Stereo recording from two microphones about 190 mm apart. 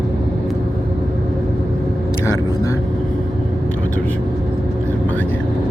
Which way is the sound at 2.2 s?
15° left (ahead or behind).